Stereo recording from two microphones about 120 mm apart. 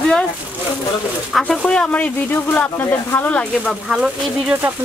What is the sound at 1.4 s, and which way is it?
Speech, 10° left (ahead or behind).